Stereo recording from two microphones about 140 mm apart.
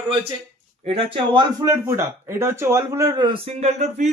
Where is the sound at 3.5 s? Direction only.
55° right (ahead or behind).